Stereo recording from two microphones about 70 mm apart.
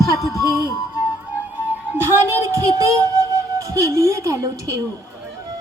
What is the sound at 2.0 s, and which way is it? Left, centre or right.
Speech, right.